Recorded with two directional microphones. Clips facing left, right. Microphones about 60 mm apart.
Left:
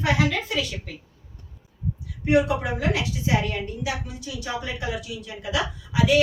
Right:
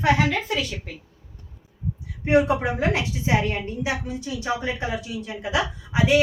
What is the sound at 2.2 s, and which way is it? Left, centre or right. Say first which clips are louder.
A woman's voice: right 2 dB; right.